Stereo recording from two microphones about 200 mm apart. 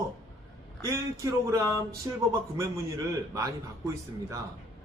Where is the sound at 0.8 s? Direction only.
15° right (ahead or behind).